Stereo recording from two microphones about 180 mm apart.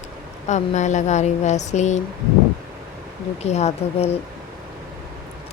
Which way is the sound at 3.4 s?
35° left (ahead or behind).